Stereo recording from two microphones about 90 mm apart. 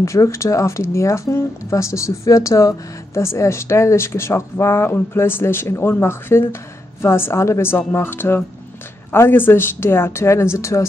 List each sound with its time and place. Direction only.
0.0 s speech: 35° left (ahead or behind)